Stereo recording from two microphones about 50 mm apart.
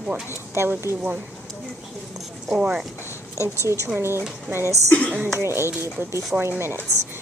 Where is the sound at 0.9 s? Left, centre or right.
Left.